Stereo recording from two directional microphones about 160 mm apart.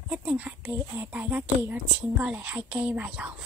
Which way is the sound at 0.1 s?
10° right (ahead or behind).